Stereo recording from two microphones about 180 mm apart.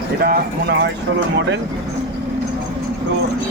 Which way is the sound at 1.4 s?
90° right.